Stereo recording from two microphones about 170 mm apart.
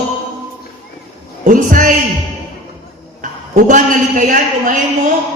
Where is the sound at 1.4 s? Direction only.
50° right (ahead or behind).